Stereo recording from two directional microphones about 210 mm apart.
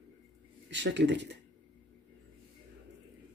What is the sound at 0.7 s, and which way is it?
Speech, 60° right (ahead or behind).